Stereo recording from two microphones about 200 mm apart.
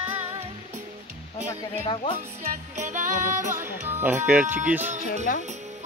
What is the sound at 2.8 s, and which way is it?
Music, 40° right (ahead or behind).